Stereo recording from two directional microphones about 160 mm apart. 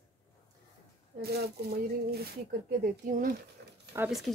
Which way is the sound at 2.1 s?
70° right (ahead or behind).